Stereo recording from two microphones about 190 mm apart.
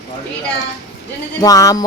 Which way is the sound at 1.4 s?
20° left (ahead or behind).